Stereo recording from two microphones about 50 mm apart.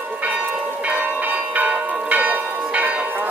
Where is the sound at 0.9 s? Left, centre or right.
Right.